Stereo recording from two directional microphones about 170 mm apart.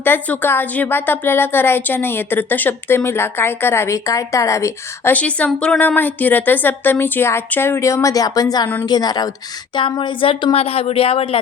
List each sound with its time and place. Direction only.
0.0 s a woman's voice: 10° left (ahead or behind); by 11.3 s 35° left (ahead or behind)